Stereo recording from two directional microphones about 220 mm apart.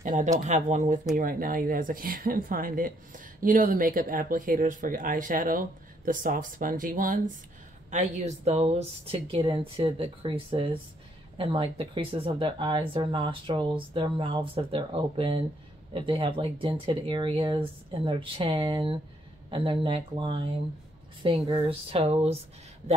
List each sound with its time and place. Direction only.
0.0 s a sound: 35° right (ahead or behind)
0.4 s speech: 35° right (ahead or behind)
21.5 s speech: 25° right (ahead or behind)